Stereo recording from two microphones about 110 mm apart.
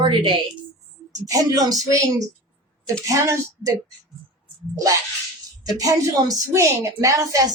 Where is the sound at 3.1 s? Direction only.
30° right (ahead or behind).